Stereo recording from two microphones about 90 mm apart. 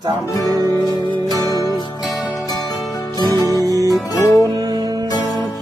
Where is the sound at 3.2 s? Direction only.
45° left (ahead or behind).